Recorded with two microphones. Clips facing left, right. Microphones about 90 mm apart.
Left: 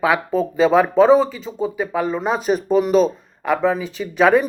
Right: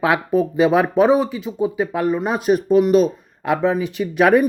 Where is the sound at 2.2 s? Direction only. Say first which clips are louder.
Right 1 dB; 5° right (ahead or behind).